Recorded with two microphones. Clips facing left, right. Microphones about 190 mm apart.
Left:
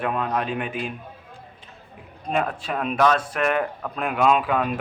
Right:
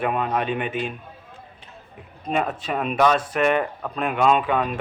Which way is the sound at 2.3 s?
Centre (ahead or behind).